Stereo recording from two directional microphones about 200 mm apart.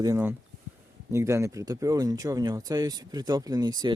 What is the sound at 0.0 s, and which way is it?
Speech, 15° right (ahead or behind).